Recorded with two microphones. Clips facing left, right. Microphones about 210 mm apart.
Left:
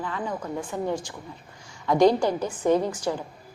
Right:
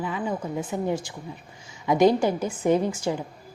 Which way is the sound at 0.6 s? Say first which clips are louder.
Right 1 dB; 20° right (ahead or behind).